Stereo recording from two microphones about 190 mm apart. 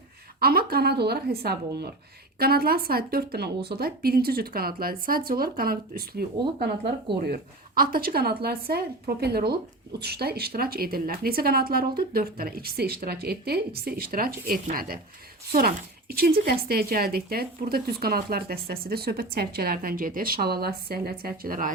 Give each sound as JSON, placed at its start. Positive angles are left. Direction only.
{"t": 0.3, "sound": "a woman's voice", "side_deg": -50}
{"t": 7.8, "sound": "a woman's voice", "side_deg": -50}
{"t": 16.1, "sound": "a woman's voice", "side_deg": -50}